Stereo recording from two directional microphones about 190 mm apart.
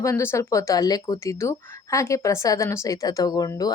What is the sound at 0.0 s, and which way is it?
Speech, 15° left (ahead or behind).